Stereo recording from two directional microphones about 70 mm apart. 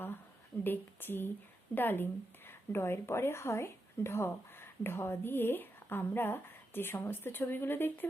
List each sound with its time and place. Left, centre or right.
0.6 s a woman's voice: left